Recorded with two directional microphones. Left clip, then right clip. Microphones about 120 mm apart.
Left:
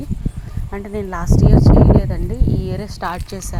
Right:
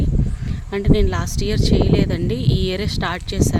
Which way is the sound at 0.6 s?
85° right.